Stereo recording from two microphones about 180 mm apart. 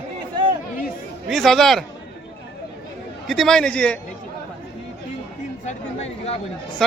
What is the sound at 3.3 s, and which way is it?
Speech, centre (ahead or behind).